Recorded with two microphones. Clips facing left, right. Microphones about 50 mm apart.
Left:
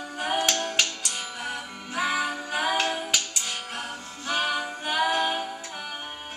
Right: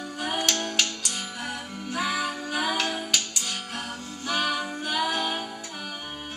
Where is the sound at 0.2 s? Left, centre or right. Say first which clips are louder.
Left 2 dB; left.